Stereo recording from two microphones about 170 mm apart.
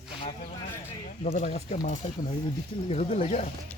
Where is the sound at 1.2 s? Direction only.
40° left (ahead or behind).